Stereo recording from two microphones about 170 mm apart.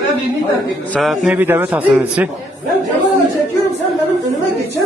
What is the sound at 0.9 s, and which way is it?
A man's voice, centre (ahead or behind).